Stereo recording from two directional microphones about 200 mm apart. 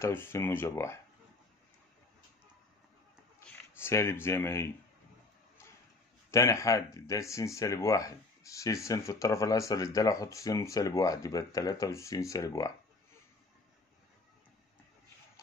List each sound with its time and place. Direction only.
0.0 s speech: 10° left (ahead or behind)
3.3 s speech: 15° left (ahead or behind)
6.3 s speech: 15° left (ahead or behind)